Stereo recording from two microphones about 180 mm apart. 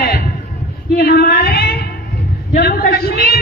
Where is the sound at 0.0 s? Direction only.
60° left (ahead or behind).